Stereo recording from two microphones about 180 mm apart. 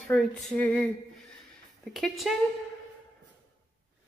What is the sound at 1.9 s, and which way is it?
Speech, centre (ahead or behind).